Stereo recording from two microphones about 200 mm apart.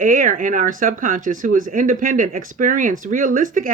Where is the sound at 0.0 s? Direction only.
40° right (ahead or behind).